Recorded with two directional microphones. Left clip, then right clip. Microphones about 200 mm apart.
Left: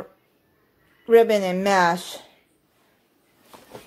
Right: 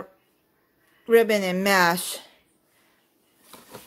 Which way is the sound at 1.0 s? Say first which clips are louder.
Left 3 dB; 10° right (ahead or behind).